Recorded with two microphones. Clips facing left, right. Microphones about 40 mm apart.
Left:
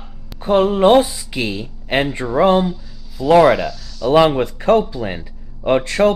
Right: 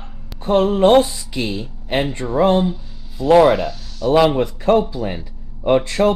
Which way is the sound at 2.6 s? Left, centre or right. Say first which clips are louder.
Right 1 dB; right.